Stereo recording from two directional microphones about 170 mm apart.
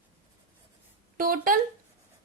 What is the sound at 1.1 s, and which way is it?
Speech, 55° right (ahead or behind).